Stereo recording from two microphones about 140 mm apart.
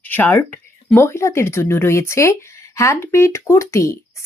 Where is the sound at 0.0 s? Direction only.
15° left (ahead or behind).